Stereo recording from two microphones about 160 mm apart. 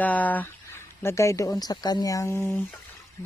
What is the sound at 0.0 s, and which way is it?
Speech, 10° left (ahead or behind).